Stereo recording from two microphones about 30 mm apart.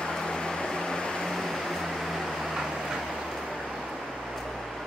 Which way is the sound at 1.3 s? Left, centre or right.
Centre.